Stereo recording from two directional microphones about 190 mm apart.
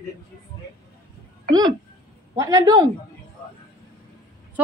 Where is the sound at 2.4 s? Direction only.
20° right (ahead or behind).